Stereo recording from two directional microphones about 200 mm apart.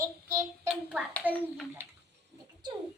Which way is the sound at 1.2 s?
10° right (ahead or behind).